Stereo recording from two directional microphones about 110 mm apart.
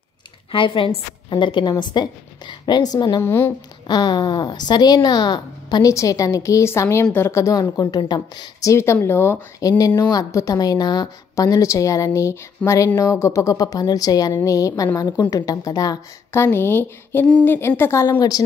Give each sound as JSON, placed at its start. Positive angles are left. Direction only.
{"t": 0.5, "sound": "a woman's voice", "side_deg": 50}
{"t": 3.2, "sound": "speech", "side_deg": 20}
{"t": 3.8, "sound": "speech", "side_deg": 45}
{"t": 7.8, "sound": "a woman's voice", "side_deg": 45}
{"t": 8.5, "sound": "speech", "side_deg": 25}
{"t": 16.4, "sound": "speech", "side_deg": 20}